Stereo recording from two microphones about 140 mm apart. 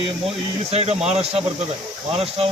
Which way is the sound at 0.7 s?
50° right (ahead or behind).